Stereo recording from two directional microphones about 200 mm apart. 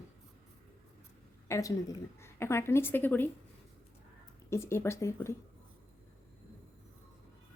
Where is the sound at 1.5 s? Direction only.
15° left (ahead or behind).